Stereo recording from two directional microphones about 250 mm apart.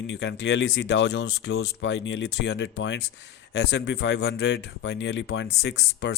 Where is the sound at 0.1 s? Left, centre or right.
Left.